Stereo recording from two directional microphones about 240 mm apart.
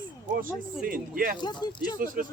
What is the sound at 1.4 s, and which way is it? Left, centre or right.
Speech, centre.